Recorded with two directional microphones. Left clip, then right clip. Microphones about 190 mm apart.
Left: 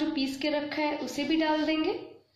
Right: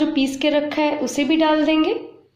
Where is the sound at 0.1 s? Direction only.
45° right (ahead or behind).